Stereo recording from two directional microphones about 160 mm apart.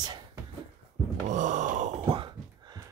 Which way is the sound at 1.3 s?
50° right (ahead or behind).